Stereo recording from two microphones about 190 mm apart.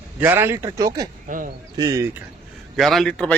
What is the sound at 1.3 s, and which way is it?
Speech, 40° right (ahead or behind).